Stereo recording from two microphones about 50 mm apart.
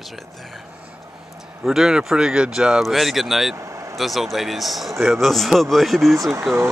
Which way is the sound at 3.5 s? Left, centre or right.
Right.